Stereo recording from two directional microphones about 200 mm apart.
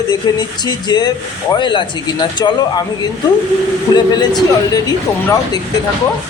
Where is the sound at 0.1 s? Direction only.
20° left (ahead or behind).